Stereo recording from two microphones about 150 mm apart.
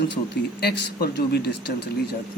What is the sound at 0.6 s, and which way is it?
Speech, 90° left.